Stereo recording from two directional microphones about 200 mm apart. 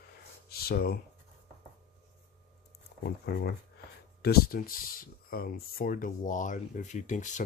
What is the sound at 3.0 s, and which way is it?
Speech, 55° left (ahead or behind).